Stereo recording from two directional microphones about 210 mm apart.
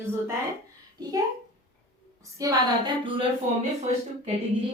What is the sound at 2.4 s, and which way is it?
Female singing, 15° right (ahead or behind).